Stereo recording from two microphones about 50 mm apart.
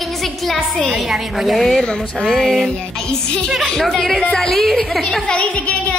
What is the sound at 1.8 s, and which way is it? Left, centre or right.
Speech, centre.